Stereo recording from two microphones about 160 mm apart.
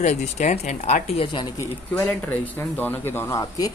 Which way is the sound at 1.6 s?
15° left (ahead or behind).